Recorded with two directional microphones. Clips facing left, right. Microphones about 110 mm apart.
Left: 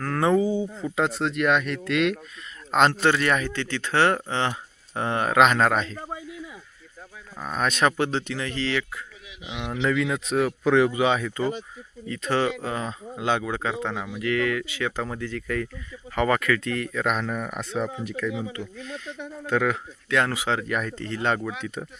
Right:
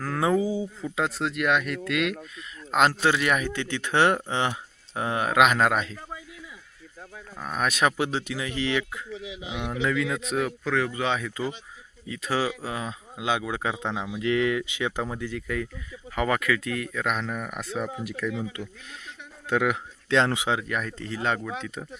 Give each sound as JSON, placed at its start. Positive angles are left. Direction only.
{"t": 0.0, "sound": "speech", "side_deg": -5}
{"t": 6.0, "sound": "a sound", "side_deg": 35}
{"t": 7.3, "sound": "speech", "side_deg": -5}
{"t": 9.8, "sound": "speech", "side_deg": -5}
{"t": 10.6, "sound": "speech", "side_deg": 15}
{"t": 18.3, "sound": "speech", "side_deg": 15}
{"t": 19.5, "sound": "speech", "side_deg": -15}
{"t": 20.1, "sound": "speech", "side_deg": -25}
{"t": 20.5, "sound": "speech", "side_deg": -5}